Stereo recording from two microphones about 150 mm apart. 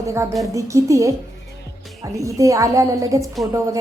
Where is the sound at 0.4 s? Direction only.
20° right (ahead or behind).